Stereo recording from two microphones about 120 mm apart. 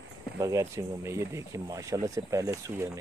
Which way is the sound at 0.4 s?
25° right (ahead or behind).